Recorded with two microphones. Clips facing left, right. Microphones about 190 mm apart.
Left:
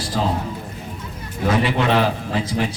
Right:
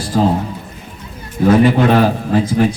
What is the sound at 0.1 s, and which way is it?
Speech, 45° right (ahead or behind).